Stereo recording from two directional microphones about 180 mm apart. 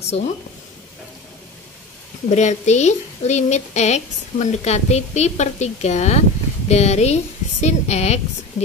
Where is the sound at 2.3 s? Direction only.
40° left (ahead or behind).